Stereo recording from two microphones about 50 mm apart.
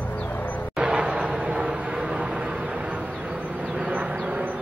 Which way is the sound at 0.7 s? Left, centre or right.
Right.